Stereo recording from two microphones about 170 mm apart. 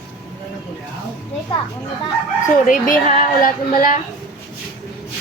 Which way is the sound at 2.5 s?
50° left (ahead or behind).